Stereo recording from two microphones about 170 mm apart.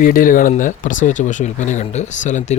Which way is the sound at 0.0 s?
55° left (ahead or behind).